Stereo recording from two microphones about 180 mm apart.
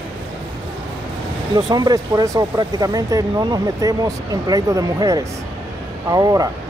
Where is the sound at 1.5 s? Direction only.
20° right (ahead or behind).